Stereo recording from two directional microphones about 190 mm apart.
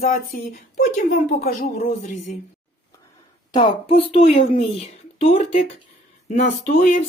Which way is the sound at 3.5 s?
30° left (ahead or behind).